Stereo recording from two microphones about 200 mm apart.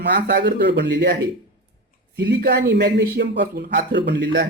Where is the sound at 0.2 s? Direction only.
60° right (ahead or behind).